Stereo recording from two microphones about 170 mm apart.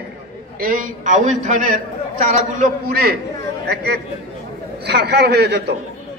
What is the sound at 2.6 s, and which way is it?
A man's voice, 60° right (ahead or behind).